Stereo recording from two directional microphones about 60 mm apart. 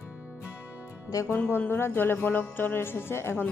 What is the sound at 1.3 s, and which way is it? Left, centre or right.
Speech, left.